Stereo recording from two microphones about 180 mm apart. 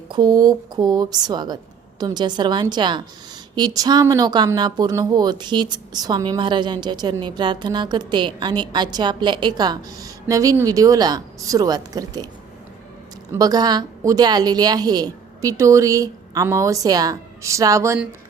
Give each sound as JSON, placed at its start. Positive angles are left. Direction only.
{"t": 0.1, "sound": "speech", "side_deg": -20}
{"t": 13.3, "sound": "speech", "side_deg": -20}